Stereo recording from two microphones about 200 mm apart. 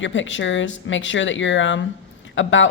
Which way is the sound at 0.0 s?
70° left (ahead or behind).